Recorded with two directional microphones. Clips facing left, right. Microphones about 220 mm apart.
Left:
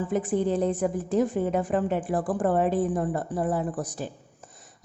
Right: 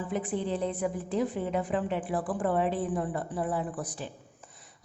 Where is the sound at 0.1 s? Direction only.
45° left (ahead or behind).